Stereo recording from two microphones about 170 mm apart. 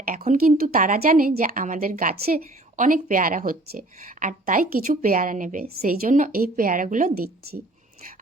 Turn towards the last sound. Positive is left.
turn(degrees=-50)  # may be behind; listen again after turning